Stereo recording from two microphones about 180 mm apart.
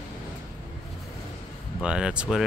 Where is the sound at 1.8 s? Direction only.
5° right (ahead or behind).